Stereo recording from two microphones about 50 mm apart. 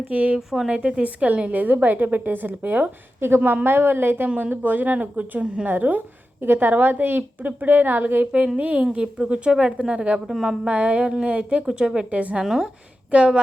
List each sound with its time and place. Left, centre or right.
0.1 s a woman's voice: right
0.3 s a woman's voice: centre
0.7 s a woman's voice: right
3.2 s a woman's voice: right
8.5 s a woman's voice: right
10.2 s a woman's voice: centre
10.7 s a woman's voice: right
12.4 s a woman's voice: centre
13.1 s speech: right